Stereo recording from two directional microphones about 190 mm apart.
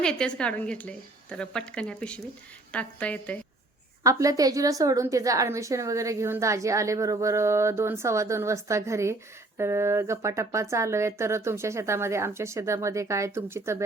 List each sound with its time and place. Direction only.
0.0 s a woman's voice: 5° left (ahead or behind)
4.0 s a woman's voice: 15° right (ahead or behind)